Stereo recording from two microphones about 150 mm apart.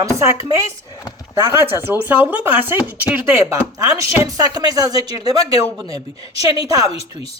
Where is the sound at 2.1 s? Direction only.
15° right (ahead or behind).